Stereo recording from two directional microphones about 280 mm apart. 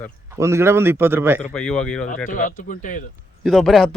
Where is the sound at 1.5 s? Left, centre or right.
Centre.